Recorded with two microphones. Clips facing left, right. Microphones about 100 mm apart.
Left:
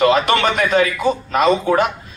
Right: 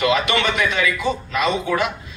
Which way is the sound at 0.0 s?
45° left (ahead or behind).